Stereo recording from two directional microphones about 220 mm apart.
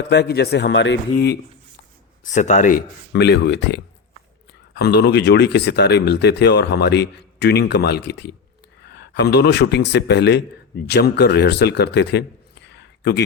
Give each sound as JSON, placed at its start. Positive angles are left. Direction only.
{"t": 0.1, "sound": "speech", "side_deg": 50}
{"t": 2.2, "sound": "speech", "side_deg": 35}
{"t": 3.1, "sound": "speech", "side_deg": 50}